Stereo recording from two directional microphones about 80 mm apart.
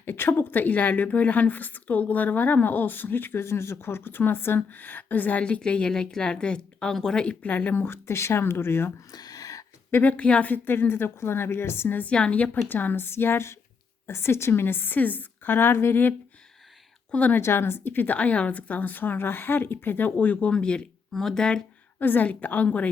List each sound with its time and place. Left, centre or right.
0.0 s speech: left
9.1 s a sound: left
9.9 s speech: centre
12.6 s speech: left
17.4 s speech: left; by 21.6 s centre
21.9 s speech: left